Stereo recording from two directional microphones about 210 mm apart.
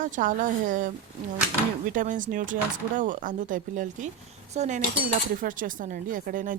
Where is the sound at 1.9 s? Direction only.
40° right (ahead or behind).